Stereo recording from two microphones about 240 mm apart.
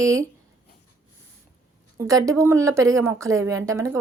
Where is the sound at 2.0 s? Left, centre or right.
Centre.